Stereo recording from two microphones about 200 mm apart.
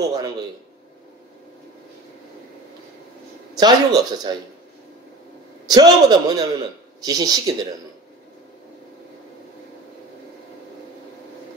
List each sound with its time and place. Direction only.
0.0 s a man's voice: 20° right (ahead or behind)
3.5 s a man's voice: 20° right (ahead or behind)
5.7 s a man's voice: 20° right (ahead or behind)